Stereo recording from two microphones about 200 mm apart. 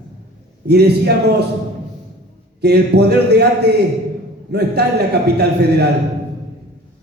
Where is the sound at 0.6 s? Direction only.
55° right (ahead or behind).